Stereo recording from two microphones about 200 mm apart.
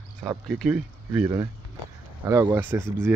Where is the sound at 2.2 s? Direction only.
20° right (ahead or behind).